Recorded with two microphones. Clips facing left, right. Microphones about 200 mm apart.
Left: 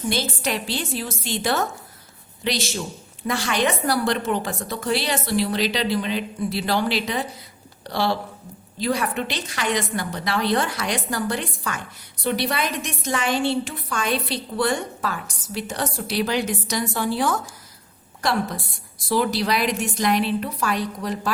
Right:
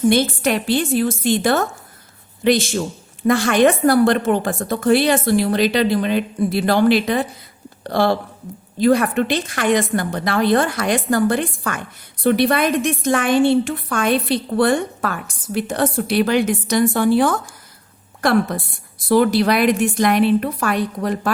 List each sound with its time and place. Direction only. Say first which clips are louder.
0.1 s a woman's voice: right 8 dB; 55° right (ahead or behind)